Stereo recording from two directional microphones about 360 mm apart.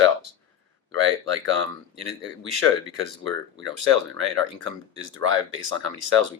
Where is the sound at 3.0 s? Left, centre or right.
Right.